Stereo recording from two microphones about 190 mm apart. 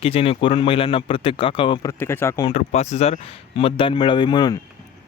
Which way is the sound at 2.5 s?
35° left (ahead or behind).